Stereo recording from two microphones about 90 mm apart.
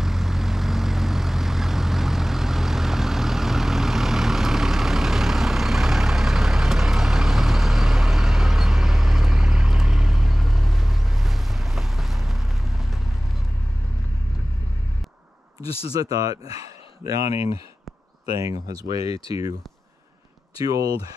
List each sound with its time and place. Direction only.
0.0 s vehicle: 5° right (ahead or behind)
16.0 s speech: 40° right (ahead or behind)
19.0 s speech: 85° left
20.5 s speech: 40° right (ahead or behind)